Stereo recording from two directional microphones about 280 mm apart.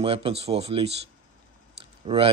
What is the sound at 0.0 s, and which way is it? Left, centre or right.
Speech, centre.